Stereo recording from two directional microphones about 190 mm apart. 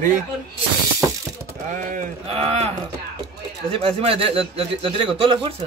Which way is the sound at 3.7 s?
30° right (ahead or behind).